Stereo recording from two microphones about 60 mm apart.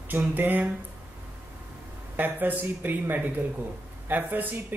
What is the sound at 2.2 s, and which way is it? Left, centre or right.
Speech, right.